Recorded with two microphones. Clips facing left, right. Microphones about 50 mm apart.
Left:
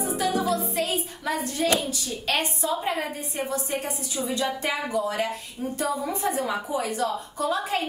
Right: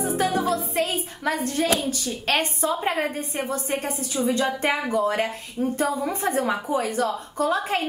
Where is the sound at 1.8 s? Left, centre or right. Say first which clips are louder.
Right 3 dB; right.